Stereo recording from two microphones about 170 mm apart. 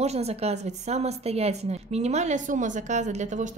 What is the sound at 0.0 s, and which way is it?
A woman's voice, 40° right (ahead or behind).